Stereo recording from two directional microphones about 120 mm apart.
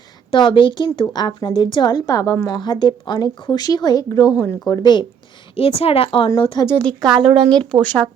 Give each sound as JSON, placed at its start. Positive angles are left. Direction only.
{"t": 0.3, "sound": "a woman's voice", "side_deg": 40}
{"t": 2.6, "sound": "speech", "side_deg": 40}
{"t": 5.5, "sound": "a woman's voice", "side_deg": 55}
{"t": 6.8, "sound": "speech", "side_deg": 5}
{"t": 7.3, "sound": "speech", "side_deg": -40}
{"t": 7.6, "sound": "speech", "side_deg": 10}